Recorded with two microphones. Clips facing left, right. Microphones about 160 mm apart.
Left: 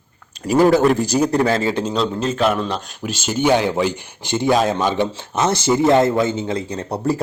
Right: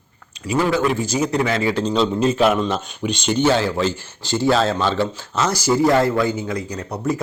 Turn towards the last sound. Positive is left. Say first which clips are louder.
# left 2 dB
turn(degrees=30)  # may be behind; listen again after turning